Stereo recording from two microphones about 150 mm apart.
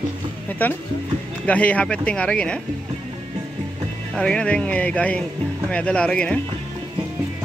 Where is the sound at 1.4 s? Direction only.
10° left (ahead or behind).